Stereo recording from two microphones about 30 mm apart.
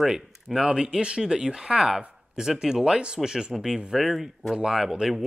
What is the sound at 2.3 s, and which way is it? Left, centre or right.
Speech, centre.